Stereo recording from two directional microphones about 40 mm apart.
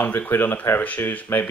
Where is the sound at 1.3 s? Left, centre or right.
Left.